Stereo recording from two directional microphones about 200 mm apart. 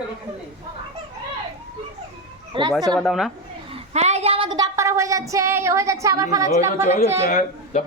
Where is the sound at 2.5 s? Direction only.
25° right (ahead or behind).